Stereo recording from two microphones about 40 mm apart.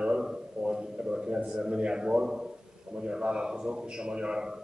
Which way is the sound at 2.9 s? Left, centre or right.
Right.